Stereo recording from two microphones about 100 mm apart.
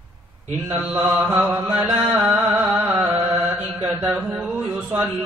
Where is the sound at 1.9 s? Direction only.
10° right (ahead or behind).